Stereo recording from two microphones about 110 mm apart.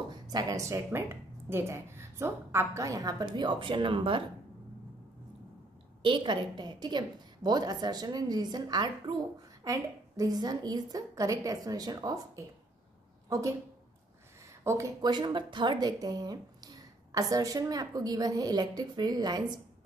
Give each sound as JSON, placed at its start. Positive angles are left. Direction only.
{"t": 0.1, "sound": "speech", "side_deg": -35}
{"t": 6.0, "sound": "speech", "side_deg": -45}
{"t": 13.3, "sound": "a woman's voice", "side_deg": -30}
{"t": 14.5, "sound": "a sound", "side_deg": -25}
{"t": 15.0, "sound": "speech", "side_deg": -40}